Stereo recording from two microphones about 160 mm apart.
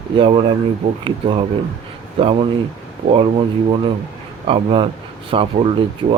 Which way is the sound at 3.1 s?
35° right (ahead or behind).